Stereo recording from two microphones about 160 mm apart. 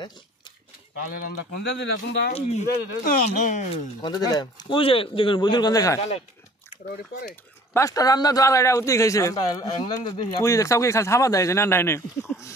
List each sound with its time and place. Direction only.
1.2 s speech: 90° left
2.3 s speech: 45° left (ahead or behind)
3.7 s a man's voice: 25° left (ahead or behind)
7.7 s a man's voice: 20° left (ahead or behind)